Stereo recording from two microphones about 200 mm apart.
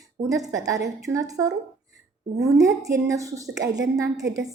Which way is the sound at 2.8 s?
15° right (ahead or behind).